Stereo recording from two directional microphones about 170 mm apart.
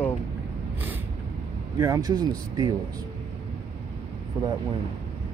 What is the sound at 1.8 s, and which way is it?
Speech, 20° right (ahead or behind).